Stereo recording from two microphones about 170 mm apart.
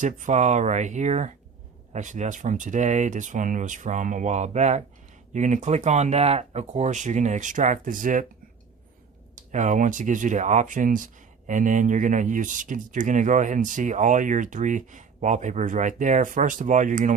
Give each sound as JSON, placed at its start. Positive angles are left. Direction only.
{"t": 0.0, "sound": "speech", "side_deg": -45}
{"t": 9.3, "sound": "speech", "side_deg": -45}